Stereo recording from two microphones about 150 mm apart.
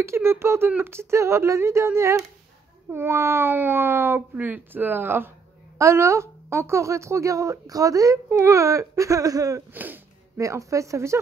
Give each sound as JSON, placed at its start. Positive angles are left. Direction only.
{"t": 0.0, "sound": "speech", "side_deg": -15}